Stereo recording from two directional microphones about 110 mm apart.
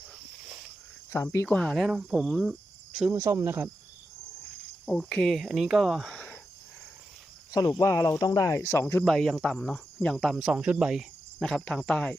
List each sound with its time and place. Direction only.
1.1 s speech: 25° left (ahead or behind)
1.5 s cricket: centre (ahead or behind)
3.1 s speech: 25° right (ahead or behind)
4.9 s cricket: 5° left (ahead or behind)
7.7 s speech: 30° left (ahead or behind)
9.0 s cricket: centre (ahead or behind)
10.3 s cricket: 10° right (ahead or behind)